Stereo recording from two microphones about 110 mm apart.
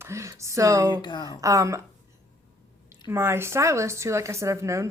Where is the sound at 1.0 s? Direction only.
40° left (ahead or behind).